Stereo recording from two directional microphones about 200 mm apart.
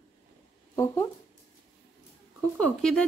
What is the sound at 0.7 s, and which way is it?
Speech, 10° left (ahead or behind).